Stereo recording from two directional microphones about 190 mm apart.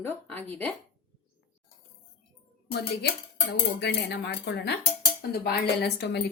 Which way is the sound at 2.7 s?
55° left (ahead or behind).